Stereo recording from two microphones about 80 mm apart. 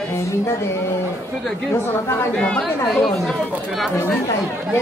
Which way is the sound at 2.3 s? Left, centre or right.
Centre.